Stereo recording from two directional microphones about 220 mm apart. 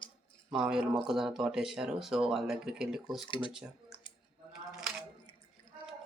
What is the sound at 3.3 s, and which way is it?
Speech, 20° left (ahead or behind).